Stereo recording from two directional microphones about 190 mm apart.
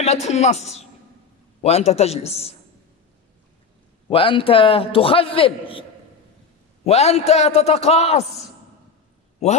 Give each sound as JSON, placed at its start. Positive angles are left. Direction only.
{"t": 0.0, "sound": "a man's voice", "side_deg": 35}
{"t": 4.1, "sound": "a man's voice", "side_deg": 25}